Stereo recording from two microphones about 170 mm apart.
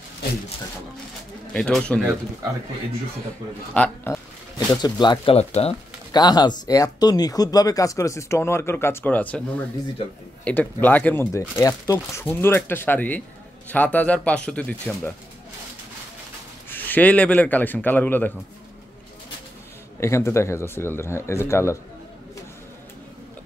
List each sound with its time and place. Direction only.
1.5 s speech: 5° left (ahead or behind)
3.7 s speech: 5° left (ahead or behind)
4.8 s speech: 25° left (ahead or behind)
6.1 s speech: 25° left (ahead or behind); by 9.4 s 10° left (ahead or behind)
10.4 s speech: 10° left (ahead or behind)
16.6 s speech: 10° left (ahead or behind)
20.0 s speech: 15° left (ahead or behind)